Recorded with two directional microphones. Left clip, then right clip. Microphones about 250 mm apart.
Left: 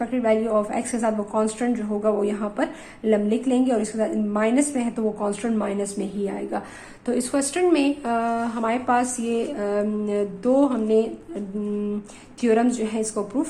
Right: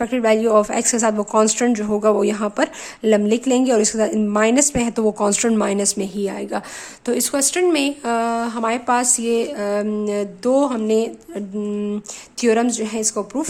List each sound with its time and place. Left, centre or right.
0.0 s a woman's voice: right